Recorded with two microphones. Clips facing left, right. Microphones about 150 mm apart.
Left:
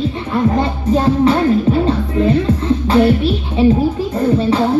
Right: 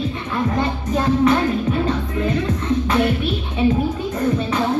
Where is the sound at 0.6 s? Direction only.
30° left (ahead or behind).